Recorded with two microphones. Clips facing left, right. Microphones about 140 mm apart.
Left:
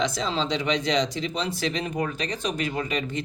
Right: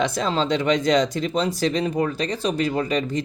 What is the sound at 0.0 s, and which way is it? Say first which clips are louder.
Speech: right 4 dB; 55° right (ahead or behind).